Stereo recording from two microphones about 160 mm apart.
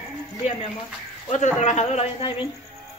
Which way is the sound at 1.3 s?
45° left (ahead or behind).